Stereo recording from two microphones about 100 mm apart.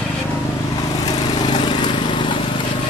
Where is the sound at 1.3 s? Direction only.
45° left (ahead or behind).